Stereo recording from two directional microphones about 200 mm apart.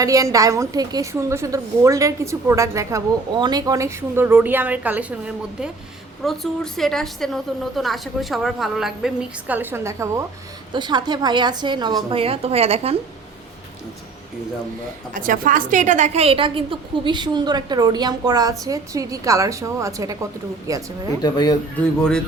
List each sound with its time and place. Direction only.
0.0 s a woman's voice: 15° right (ahead or behind)
15.1 s a woman's voice: 40° right (ahead or behind); by 20.8 s 15° right (ahead or behind)
21.2 s speech: 20° left (ahead or behind)